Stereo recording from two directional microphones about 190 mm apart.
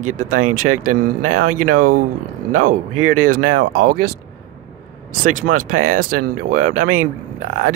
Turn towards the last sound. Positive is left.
turn(degrees=-40)  # may be behind; listen again after turning